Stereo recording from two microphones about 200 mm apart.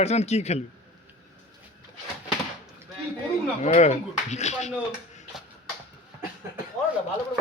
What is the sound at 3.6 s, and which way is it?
Speech, 35° left (ahead or behind).